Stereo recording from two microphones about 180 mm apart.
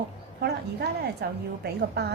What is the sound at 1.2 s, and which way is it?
Speech, 65° right (ahead or behind).